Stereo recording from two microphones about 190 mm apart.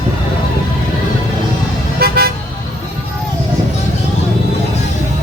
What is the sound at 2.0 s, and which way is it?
Vehicle, 55° right (ahead or behind).